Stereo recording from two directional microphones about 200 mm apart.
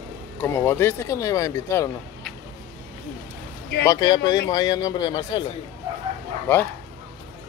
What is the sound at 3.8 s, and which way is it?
Speech, 20° left (ahead or behind).